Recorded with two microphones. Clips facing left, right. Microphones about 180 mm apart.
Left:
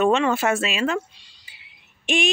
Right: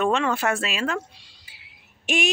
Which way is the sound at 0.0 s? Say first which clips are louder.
Left 3 dB; 5° left (ahead or behind).